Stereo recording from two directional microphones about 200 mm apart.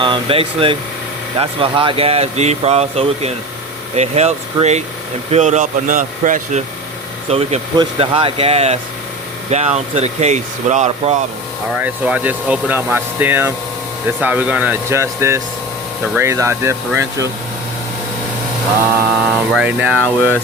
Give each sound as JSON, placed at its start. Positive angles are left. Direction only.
{"t": 0.0, "sound": "speech", "side_deg": -25}
{"t": 11.7, "sound": "speech", "side_deg": -5}
{"t": 19.5, "sound": "speech", "side_deg": -5}
{"t": 20.0, "sound": "speech", "side_deg": 10}